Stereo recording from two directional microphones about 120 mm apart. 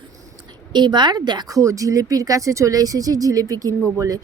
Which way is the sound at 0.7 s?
40° right (ahead or behind).